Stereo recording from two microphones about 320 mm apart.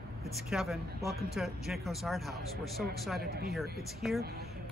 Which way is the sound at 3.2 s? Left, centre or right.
Right.